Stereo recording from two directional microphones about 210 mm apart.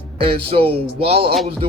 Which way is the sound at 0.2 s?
25° right (ahead or behind).